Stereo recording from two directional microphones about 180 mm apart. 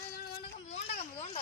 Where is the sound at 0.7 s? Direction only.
35° left (ahead or behind).